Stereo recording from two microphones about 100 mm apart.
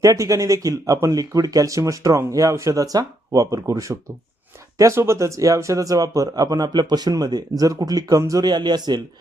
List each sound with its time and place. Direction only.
0.0 s a man's voice: 35° right (ahead or behind)